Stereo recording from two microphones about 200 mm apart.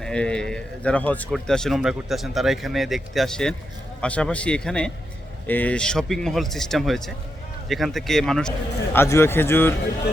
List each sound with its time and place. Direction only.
0.0 s speech: 5° left (ahead or behind)